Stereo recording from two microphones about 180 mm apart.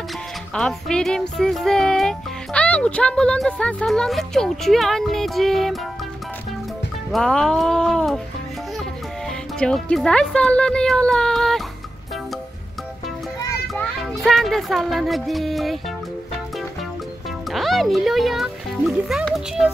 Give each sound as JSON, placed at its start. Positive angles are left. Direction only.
{"t": 0.6, "sound": "speech", "side_deg": 5}
{"t": 7.1, "sound": "speech", "side_deg": 5}
{"t": 9.6, "sound": "speech", "side_deg": 5}
{"t": 13.4, "sound": "children playing", "side_deg": 15}
{"t": 14.2, "sound": "speech", "side_deg": 0}
{"t": 17.5, "sound": "speech", "side_deg": 0}